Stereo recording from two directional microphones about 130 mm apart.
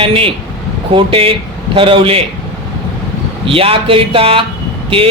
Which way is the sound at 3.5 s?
45° right (ahead or behind).